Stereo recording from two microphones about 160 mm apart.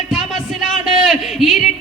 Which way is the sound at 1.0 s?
Centre (ahead or behind).